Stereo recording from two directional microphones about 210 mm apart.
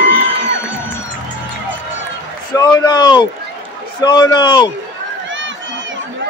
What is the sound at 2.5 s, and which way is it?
A man's voice, 15° left (ahead or behind).